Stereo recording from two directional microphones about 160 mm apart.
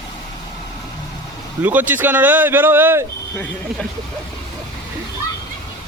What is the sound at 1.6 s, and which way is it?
Speech, 10° right (ahead or behind).